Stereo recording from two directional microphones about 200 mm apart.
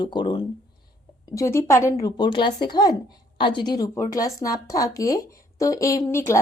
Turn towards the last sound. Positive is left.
turn(degrees=15)  # may be behind; listen again after turning